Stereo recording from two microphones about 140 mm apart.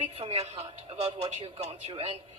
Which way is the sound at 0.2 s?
45° right (ahead or behind).